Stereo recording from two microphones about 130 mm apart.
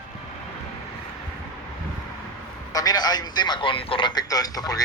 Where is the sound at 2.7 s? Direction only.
30° left (ahead or behind).